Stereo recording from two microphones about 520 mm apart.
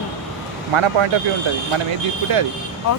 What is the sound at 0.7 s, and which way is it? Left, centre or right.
Speech, right.